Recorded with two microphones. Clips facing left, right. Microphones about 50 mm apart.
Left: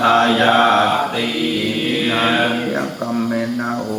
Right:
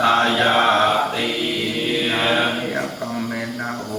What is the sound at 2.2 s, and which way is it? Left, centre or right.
Mantra, left.